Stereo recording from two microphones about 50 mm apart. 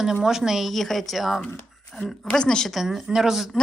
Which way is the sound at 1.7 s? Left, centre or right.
Centre.